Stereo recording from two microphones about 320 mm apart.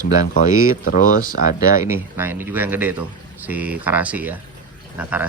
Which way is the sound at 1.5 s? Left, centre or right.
Centre.